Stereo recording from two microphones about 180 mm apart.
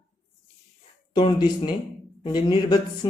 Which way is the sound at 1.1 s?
25° left (ahead or behind).